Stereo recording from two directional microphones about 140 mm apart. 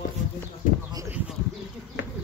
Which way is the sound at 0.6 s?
70° left (ahead or behind).